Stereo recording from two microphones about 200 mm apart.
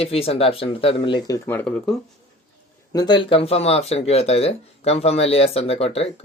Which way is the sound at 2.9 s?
20° left (ahead or behind).